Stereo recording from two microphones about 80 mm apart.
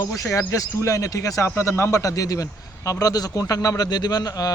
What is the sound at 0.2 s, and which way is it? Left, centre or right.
A man's voice, left.